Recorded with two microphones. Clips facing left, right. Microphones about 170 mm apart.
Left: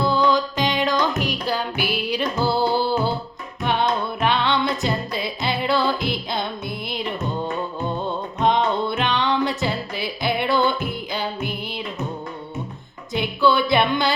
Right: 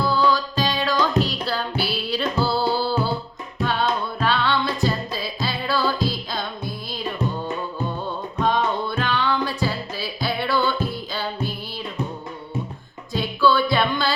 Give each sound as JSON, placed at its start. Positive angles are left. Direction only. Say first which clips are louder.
{"t": 0.0, "sound": "music", "louder": "left 1 dB", "side_deg": 20}
{"t": 8.4, "sound": "music", "louder": "left 2 dB", "side_deg": 20}
{"t": 13.1, "sound": "music", "louder": "even", "side_deg": 20}